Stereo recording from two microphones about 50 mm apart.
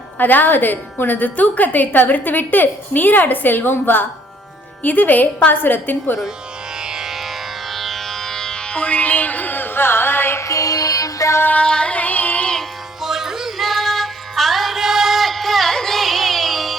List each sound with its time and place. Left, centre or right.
0.2 s a woman's voice: left
6.7 s music: centre; by 10.4 s left
11.2 s music: left
11.5 s music: centre
13.0 s music: centre